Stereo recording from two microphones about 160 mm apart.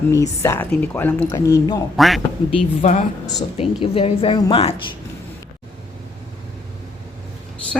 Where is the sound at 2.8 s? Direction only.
45° left (ahead or behind); by 4.5 s 30° left (ahead or behind).